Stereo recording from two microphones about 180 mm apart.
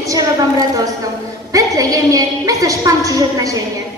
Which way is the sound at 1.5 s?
20° right (ahead or behind).